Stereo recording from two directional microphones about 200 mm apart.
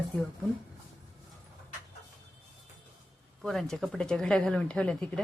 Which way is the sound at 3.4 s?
Centre (ahead or behind).